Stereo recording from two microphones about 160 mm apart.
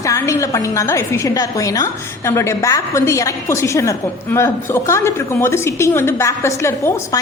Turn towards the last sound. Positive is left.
turn(degrees=15)  # may be behind; listen again after turning